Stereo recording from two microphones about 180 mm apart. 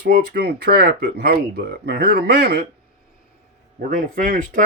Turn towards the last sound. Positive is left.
turn(degrees=-50)  # may be behind; listen again after turning